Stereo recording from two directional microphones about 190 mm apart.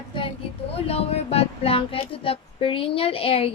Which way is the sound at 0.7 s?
30° left (ahead or behind).